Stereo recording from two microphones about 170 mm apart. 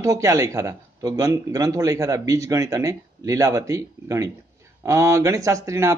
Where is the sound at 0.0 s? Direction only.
20° right (ahead or behind).